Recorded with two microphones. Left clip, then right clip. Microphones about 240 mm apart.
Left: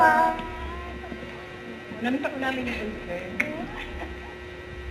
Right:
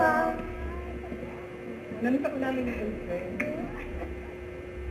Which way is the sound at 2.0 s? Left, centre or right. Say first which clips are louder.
Left 1 dB; centre.